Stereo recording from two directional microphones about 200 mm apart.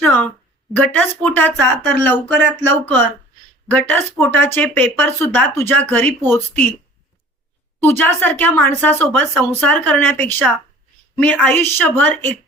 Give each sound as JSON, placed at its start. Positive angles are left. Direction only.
{"t": 0.9, "sound": "speech", "side_deg": 10}
{"t": 7.8, "sound": "speech", "side_deg": 10}